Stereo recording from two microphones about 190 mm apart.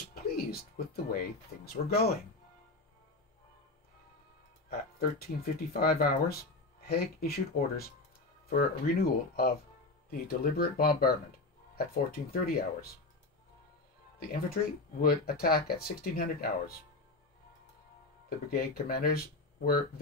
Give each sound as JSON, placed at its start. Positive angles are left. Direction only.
{"t": 0.1, "sound": "speech", "side_deg": 55}
{"t": 4.6, "sound": "speech", "side_deg": 55}
{"t": 14.3, "sound": "speech", "side_deg": 50}
{"t": 18.5, "sound": "speech", "side_deg": 50}